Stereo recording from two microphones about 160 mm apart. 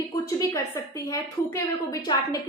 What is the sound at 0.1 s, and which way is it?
A woman's voice, 20° left (ahead or behind).